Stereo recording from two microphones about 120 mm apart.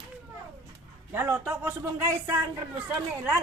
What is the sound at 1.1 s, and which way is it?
A man's voice, 20° right (ahead or behind).